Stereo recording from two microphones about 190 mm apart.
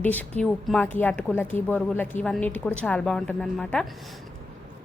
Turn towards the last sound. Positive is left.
turn(degrees=5)  # may be behind; listen again after turning